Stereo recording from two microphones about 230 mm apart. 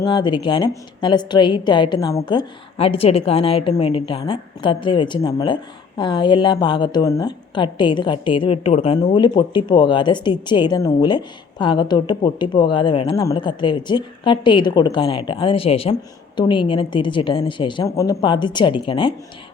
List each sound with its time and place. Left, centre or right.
0.0 s a woman's voice: centre